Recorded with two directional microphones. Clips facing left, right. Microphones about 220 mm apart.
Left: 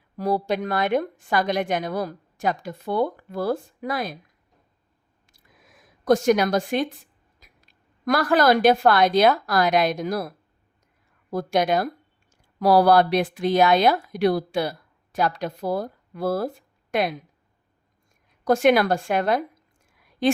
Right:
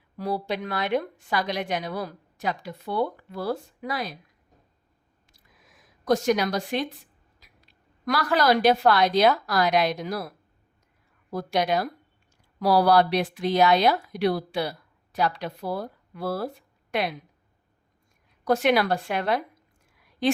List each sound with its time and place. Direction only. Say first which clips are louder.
0.2 s a woman's voice: left 5 dB; 45° left (ahead or behind)
6.1 s a woman's voice: left 4 dB; 50° left (ahead or behind)
11.3 s a woman's voice: left 3 dB; 50° left (ahead or behind)
18.4 s a woman's voice: left 4 dB; 50° left (ahead or behind)